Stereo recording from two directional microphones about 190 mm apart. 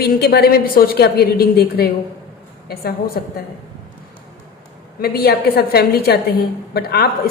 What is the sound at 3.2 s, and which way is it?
Speech, 50° left (ahead or behind).